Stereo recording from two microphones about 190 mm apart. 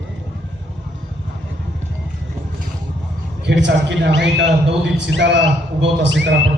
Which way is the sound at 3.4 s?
65° right (ahead or behind).